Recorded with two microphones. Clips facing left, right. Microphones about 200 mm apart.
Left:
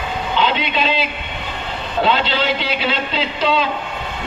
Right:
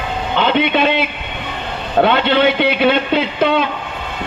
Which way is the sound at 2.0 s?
60° right (ahead or behind).